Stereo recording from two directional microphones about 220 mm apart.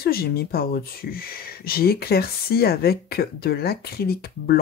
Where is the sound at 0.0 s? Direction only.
45° left (ahead or behind).